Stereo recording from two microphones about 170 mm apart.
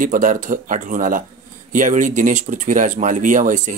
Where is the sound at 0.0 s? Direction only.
50° right (ahead or behind).